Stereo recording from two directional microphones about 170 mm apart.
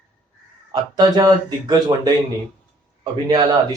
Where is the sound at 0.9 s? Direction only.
25° right (ahead or behind).